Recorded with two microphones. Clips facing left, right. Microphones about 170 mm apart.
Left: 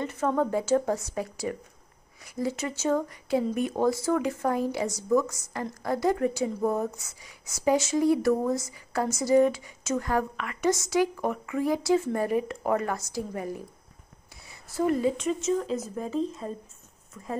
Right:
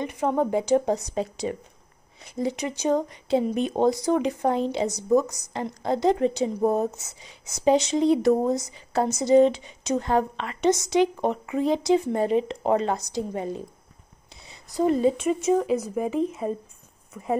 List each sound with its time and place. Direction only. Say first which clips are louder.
0.0 s a woman's voice: right 2 dB; 15° right (ahead or behind)
14.4 s a sound: right 3 dB; 20° right (ahead or behind)
15.2 s speech: right 5 dB; 15° right (ahead or behind)